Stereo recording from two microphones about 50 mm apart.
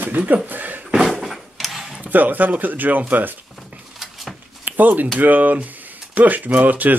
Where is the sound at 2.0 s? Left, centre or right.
Right.